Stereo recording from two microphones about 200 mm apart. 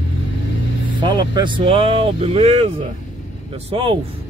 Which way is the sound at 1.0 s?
20° right (ahead or behind).